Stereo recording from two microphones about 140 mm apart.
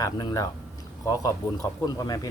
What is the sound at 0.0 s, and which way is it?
Speech, 30° left (ahead or behind).